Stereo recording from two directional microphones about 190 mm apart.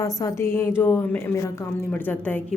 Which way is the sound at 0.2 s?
15° left (ahead or behind).